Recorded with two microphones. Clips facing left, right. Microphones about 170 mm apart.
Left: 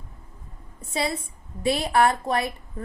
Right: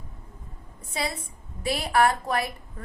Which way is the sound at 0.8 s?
25° left (ahead or behind).